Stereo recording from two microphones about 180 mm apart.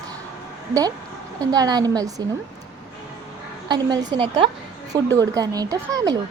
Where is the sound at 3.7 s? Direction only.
25° right (ahead or behind).